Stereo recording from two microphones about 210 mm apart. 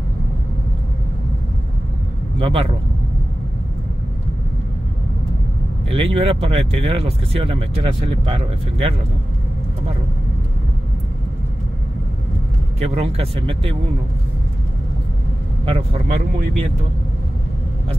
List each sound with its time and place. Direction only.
2.3 s a man's voice: 25° right (ahead or behind)
5.9 s speech: 25° right (ahead or behind)
12.7 s speech: 30° right (ahead or behind)
15.6 s speech: 30° right (ahead or behind)